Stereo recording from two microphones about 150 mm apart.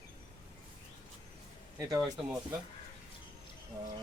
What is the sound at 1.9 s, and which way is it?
Speech, centre (ahead or behind).